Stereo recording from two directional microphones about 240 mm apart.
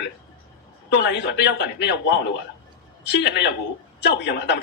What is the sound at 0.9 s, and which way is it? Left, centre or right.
A man's voice, left.